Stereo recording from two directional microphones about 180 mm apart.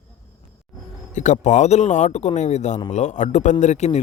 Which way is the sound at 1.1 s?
40° left (ahead or behind).